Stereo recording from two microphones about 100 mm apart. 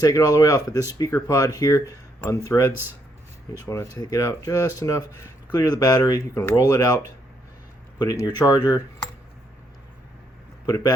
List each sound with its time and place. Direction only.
0.0 s speech: 35° left (ahead or behind)